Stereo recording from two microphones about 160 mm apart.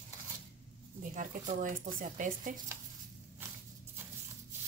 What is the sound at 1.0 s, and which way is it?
Speech, 55° right (ahead or behind).